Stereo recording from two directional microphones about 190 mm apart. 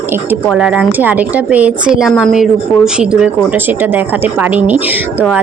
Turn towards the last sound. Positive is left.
turn(degrees=-10)  # may be behind; listen again after turning